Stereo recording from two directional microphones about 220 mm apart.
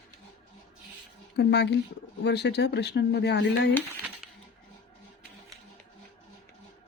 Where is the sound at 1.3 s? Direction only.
50° left (ahead or behind).